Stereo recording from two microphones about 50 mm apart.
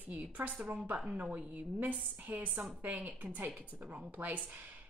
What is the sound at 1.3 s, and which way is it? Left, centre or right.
Speech, right.